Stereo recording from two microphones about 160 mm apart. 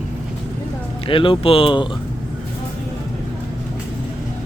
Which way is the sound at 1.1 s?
35° left (ahead or behind).